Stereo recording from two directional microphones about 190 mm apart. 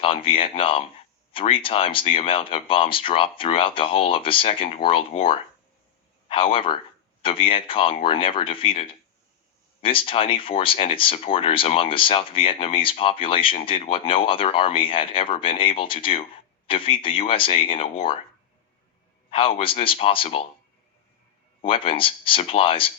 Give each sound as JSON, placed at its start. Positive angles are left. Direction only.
{"t": 0.0, "sound": "speech", "side_deg": 30}
{"t": 19.3, "sound": "speech", "side_deg": 30}
{"t": 21.6, "sound": "speech", "side_deg": 30}